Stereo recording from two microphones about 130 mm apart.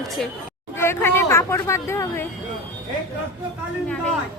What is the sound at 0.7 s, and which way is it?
Speech, 20° left (ahead or behind).